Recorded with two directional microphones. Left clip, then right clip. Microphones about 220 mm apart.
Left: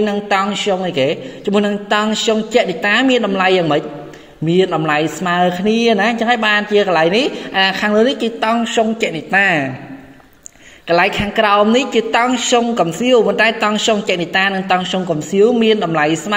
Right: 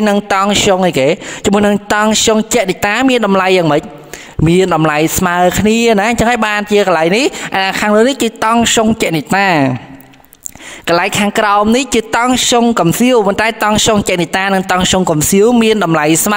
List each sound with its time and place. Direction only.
0.0 s speech: 45° right (ahead or behind)
11.0 s speech: 40° right (ahead or behind)